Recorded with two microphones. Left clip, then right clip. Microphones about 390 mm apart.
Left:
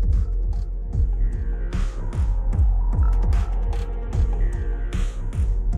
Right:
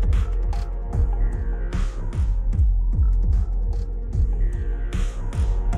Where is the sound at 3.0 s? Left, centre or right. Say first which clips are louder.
Left 5 dB; left.